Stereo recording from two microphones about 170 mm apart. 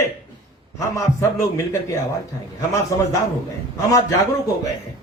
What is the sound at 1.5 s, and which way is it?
A man's voice, 15° left (ahead or behind).